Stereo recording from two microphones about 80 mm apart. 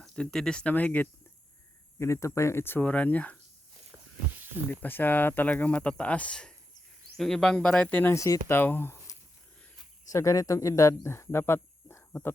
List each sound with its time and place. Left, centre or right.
0.0 s speech: centre
0.7 s speech: left
2.0 s speech: left; by 3.3 s centre
4.7 s speech: left
8.1 s speech: left
8.4 s speech: left
10.1 s speech: left